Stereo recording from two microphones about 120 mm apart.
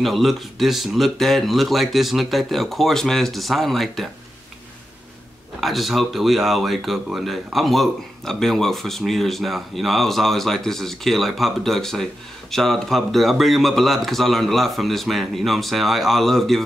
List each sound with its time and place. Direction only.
0.0 s speech: centre (ahead or behind)
5.6 s speech: centre (ahead or behind)